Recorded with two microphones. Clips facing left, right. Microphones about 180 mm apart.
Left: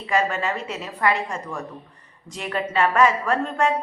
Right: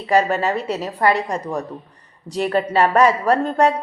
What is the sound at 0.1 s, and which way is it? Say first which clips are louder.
Speech: right 6 dB; 35° right (ahead or behind).